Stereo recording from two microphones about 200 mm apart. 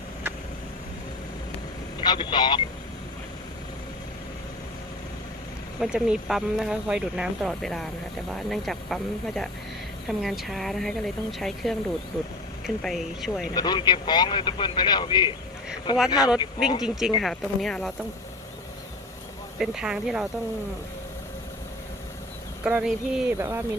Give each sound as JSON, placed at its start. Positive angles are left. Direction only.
{"t": 2.0, "sound": "speech", "side_deg": 25}
{"t": 5.8, "sound": "speech", "side_deg": -5}
{"t": 13.5, "sound": "a man's voice", "side_deg": 20}
{"t": 16.1, "sound": "speech", "side_deg": -5}
{"t": 19.5, "sound": "speech", "side_deg": -5}
{"t": 22.6, "sound": "speech", "side_deg": -5}